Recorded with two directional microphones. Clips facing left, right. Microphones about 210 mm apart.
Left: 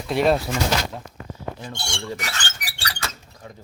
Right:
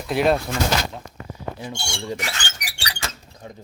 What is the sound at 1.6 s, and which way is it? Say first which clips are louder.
Speech: right 1 dB; 10° right (ahead or behind).